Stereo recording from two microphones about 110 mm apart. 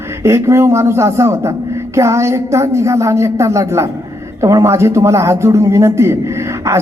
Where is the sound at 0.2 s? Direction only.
25° right (ahead or behind).